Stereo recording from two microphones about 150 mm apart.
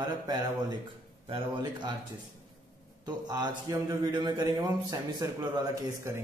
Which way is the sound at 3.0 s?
25° right (ahead or behind).